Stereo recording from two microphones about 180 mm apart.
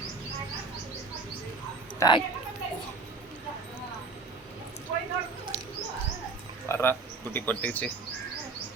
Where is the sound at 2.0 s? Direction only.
25° left (ahead or behind).